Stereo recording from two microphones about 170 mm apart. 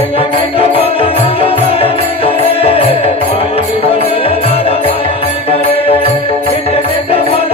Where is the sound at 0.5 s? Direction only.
35° left (ahead or behind).